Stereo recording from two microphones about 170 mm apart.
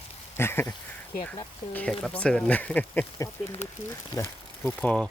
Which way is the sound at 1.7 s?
10° left (ahead or behind).